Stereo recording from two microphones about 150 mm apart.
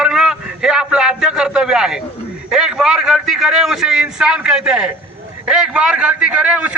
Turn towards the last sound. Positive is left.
turn(degrees=-10)  # may be behind; listen again after turning